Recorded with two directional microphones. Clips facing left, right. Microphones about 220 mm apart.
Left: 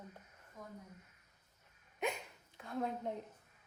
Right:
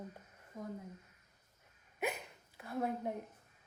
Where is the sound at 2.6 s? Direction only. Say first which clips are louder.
Right 2 dB; 5° right (ahead or behind).